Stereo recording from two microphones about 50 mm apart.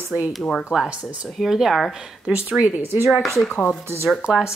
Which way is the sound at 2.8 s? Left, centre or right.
Right.